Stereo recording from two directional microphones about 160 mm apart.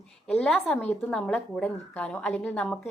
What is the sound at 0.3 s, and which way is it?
A woman's voice, 5° left (ahead or behind).